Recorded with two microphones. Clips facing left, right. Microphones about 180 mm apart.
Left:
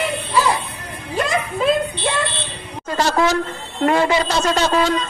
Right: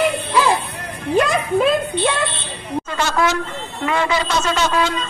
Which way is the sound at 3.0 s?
35° left (ahead or behind).